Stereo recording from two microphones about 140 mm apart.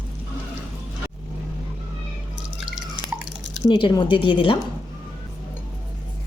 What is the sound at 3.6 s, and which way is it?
Speech, 35° left (ahead or behind).